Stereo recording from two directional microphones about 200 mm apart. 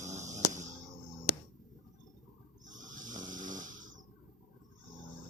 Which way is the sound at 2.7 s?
40° right (ahead or behind).